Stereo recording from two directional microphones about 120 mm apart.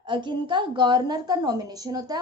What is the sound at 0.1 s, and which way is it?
A woman's voice, 40° right (ahead or behind).